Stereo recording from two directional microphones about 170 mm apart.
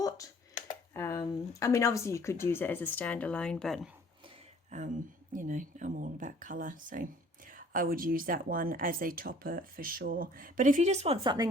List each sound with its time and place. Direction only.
0.9 s speech: 15° left (ahead or behind)
4.7 s speech: 45° right (ahead or behind); by 11.4 s 25° right (ahead or behind)